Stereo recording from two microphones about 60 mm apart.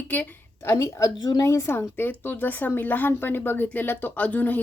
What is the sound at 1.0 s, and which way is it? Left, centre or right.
Speech, left.